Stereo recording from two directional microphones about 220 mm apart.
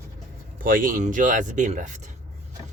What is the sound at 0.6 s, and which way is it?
Speech, 40° right (ahead or behind).